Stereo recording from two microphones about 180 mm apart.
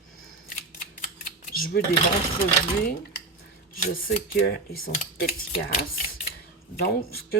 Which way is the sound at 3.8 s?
50° left (ahead or behind).